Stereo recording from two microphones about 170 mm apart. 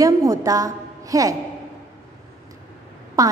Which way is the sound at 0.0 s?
20° right (ahead or behind).